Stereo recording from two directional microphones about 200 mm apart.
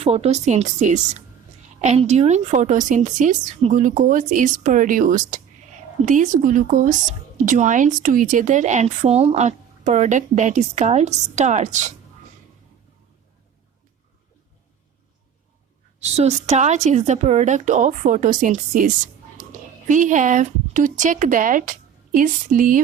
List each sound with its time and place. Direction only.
0.0 s a woman's voice: 30° right (ahead or behind)
16.0 s a woman's voice: 30° right (ahead or behind)
19.4 s a sound: 40° right (ahead or behind)
19.9 s speech: 40° right (ahead or behind)